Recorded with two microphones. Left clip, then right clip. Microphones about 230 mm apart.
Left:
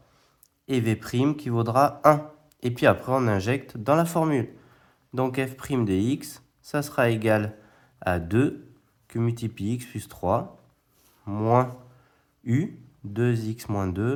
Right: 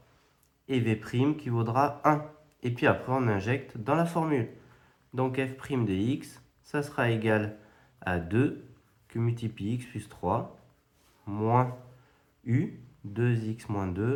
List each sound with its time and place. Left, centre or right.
0.7 s speech: left
13.1 s speech: left